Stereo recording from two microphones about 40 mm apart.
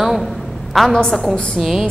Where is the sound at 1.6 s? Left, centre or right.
Centre.